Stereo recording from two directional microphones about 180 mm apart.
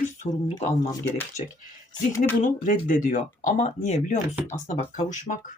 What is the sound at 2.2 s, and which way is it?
Speech, 45° left (ahead or behind).